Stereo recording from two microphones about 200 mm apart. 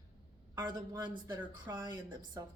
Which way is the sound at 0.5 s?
20° right (ahead or behind).